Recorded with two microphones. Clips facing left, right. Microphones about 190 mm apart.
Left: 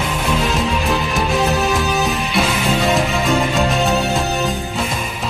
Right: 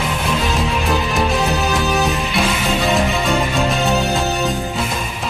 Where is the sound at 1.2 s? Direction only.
Centre (ahead or behind).